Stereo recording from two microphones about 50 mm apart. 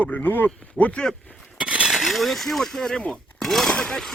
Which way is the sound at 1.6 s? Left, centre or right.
Right.